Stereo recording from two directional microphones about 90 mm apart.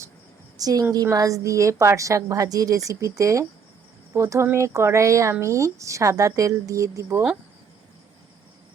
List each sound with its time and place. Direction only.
0.5 s a woman's voice: 45° right (ahead or behind)